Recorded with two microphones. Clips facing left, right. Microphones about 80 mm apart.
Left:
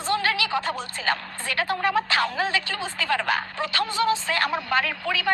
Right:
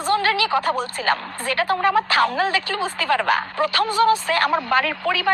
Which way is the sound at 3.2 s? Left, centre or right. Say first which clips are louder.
Right 6 dB; right.